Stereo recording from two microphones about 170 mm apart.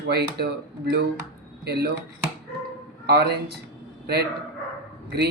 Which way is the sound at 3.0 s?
70° right (ahead or behind).